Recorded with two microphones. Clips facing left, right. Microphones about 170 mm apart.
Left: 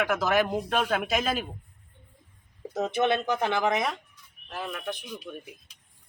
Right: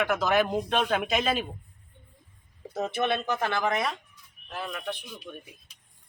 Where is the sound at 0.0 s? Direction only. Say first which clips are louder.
Even; 10° left (ahead or behind).